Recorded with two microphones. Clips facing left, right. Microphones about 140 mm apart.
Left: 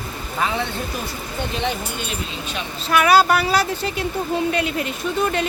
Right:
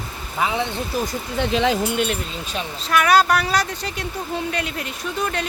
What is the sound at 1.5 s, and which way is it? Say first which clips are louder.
Speech: right 7 dB; 90° right.